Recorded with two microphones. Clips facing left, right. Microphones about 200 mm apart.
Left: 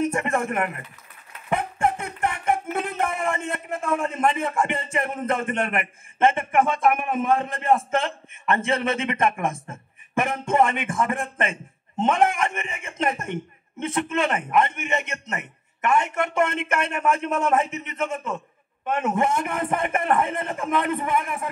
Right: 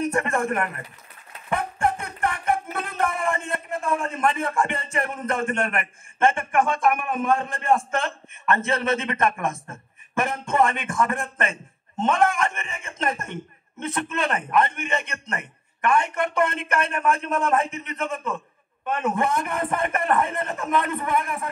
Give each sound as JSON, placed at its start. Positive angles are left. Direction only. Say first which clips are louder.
{"t": 0.0, "sound": "a man's voice", "louder": "even", "side_deg": 20}
{"t": 1.5, "sound": "music", "louder": "left 1 dB", "side_deg": 20}
{"t": 3.9, "sound": "a man's voice", "louder": "left 2 dB", "side_deg": 20}